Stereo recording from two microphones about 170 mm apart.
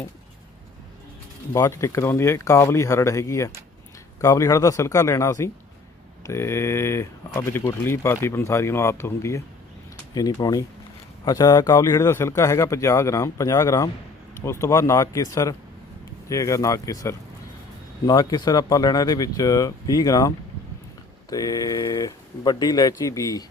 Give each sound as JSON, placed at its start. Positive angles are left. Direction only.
{"t": 1.5, "sound": "speech", "side_deg": 15}